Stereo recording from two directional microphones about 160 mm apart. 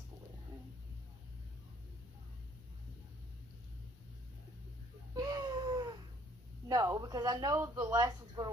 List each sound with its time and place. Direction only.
5.1 s baby cry: 25° right (ahead or behind)
6.7 s speech: 25° right (ahead or behind)